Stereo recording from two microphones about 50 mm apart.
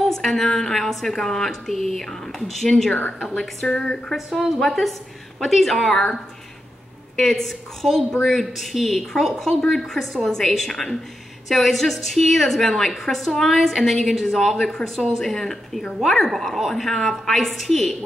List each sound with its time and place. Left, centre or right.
0.2 s a woman's voice: centre
2.9 s speech: left
3.3 s a woman's voice: centre
7.3 s a woman's voice: centre